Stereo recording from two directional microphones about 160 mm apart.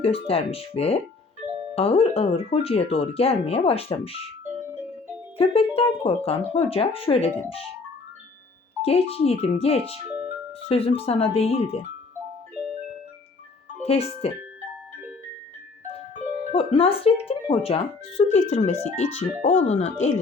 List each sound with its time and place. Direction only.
0.0 s speech: 35° left (ahead or behind)
5.4 s speech: 35° left (ahead or behind)
8.8 s speech: 40° left (ahead or behind)
10.1 s music: 10° right (ahead or behind)
10.7 s speech: 40° left (ahead or behind)
13.8 s speech: 40° left (ahead or behind)
16.4 s speech: 40° left (ahead or behind)